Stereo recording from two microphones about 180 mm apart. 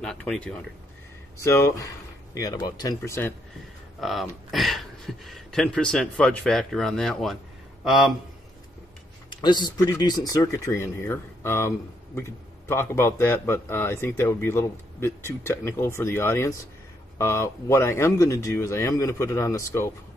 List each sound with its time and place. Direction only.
0.0 s a sound: 5° left (ahead or behind)
1.4 s speech: 15° left (ahead or behind)
3.0 s speech: 10° left (ahead or behind)
4.0 s speech: centre (ahead or behind)
9.3 s speech: 25° left (ahead or behind)